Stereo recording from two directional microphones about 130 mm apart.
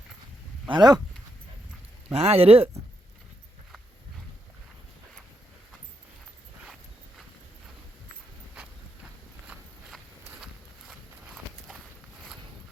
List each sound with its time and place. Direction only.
0.7 s speech: 30° right (ahead or behind)
2.1 s speech: 50° right (ahead or behind)
9.5 s walk: 10° right (ahead or behind)
10.4 s horse: 5° right (ahead or behind)